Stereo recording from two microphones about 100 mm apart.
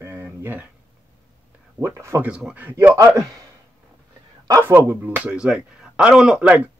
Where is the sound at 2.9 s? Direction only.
35° right (ahead or behind).